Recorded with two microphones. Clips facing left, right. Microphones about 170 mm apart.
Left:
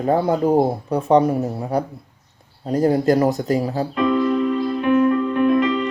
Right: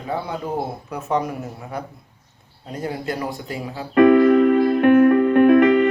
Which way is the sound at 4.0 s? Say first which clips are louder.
Right 7 dB; 60° right (ahead or behind).